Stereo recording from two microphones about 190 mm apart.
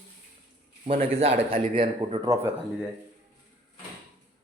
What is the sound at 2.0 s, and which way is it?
Speech, 20° right (ahead or behind).